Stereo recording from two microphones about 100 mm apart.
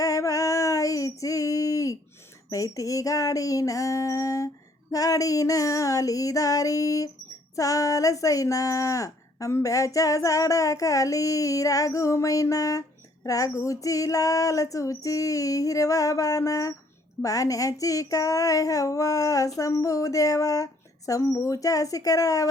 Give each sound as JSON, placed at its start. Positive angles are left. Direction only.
{"t": 0.0, "sound": "female singing", "side_deg": 35}
{"t": 2.5, "sound": "speech", "side_deg": 35}